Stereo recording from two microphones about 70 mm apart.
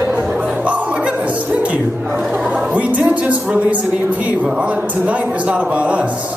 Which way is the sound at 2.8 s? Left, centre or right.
Right.